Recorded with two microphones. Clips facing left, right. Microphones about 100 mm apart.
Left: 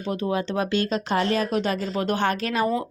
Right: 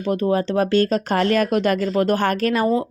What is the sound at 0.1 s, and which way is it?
Speech, 40° right (ahead or behind).